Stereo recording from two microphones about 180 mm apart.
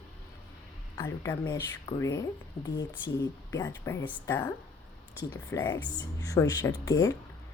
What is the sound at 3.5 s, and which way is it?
Speech, 15° left (ahead or behind).